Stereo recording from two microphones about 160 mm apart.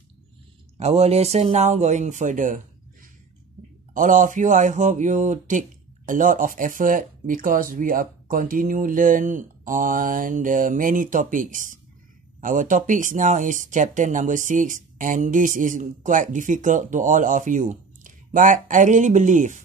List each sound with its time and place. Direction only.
0.7 s speech: 40° right (ahead or behind)